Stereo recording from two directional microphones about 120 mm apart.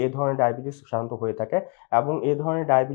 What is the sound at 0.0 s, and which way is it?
Speech, 25° left (ahead or behind).